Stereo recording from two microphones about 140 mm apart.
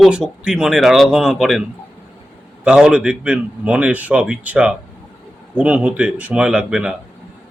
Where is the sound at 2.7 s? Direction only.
5° right (ahead or behind).